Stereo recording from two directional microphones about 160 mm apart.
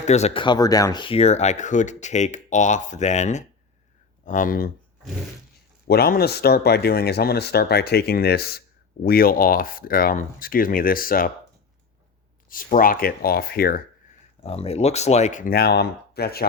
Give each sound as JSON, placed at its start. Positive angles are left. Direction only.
{"t": 0.1, "sound": "speech", "side_deg": 40}
{"t": 0.4, "sound": "speech", "side_deg": 25}
{"t": 4.3, "sound": "speech", "side_deg": 60}
{"t": 5.9, "sound": "speech", "side_deg": 75}
{"t": 12.5, "sound": "speech", "side_deg": 60}
{"t": 14.4, "sound": "speech", "side_deg": 40}